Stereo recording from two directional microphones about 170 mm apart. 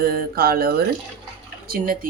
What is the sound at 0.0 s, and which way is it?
Speech, 60° right (ahead or behind).